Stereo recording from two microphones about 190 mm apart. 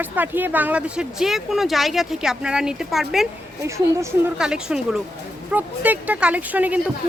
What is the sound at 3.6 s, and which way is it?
Speech, 15° right (ahead or behind).